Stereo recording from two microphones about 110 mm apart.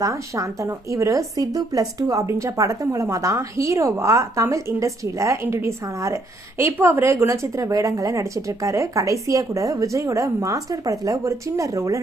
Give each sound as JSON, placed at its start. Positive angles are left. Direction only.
{"t": 0.0, "sound": "speech", "side_deg": -30}